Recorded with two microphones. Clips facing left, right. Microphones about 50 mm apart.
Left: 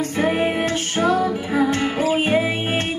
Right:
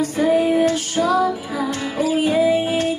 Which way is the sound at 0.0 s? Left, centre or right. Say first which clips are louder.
Right 3 dB; left.